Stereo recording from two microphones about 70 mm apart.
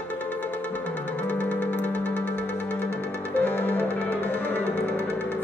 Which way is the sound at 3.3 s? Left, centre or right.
Left.